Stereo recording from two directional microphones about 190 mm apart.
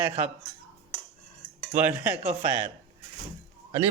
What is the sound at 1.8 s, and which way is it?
Speech, 10° right (ahead or behind).